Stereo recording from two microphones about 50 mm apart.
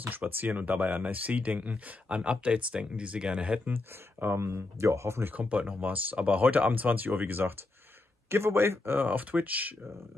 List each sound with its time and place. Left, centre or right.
0.0 s speech: right
3.7 s speech: right
4.4 s speech: right
5.2 s speech: right
8.3 s speech: right